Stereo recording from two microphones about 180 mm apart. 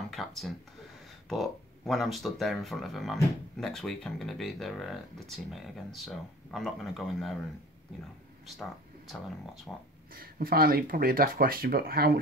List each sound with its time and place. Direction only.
0.1 s speech: centre (ahead or behind)
9.7 s speech: 5° left (ahead or behind)
10.1 s speech: 55° right (ahead or behind)